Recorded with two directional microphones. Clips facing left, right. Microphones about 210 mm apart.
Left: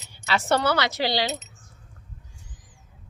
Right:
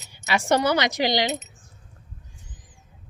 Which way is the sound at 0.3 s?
15° right (ahead or behind).